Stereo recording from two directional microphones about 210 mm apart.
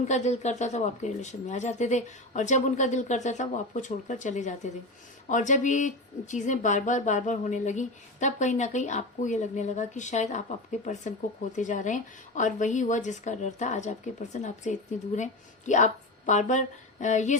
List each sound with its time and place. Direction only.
0.0 s speech: 35° left (ahead or behind)